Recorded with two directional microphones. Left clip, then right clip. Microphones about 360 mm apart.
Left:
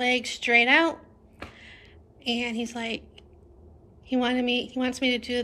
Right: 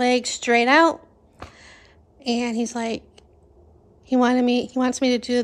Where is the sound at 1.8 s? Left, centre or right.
Right.